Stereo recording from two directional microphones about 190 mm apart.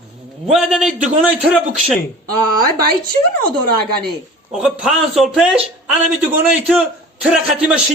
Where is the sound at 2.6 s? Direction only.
50° right (ahead or behind).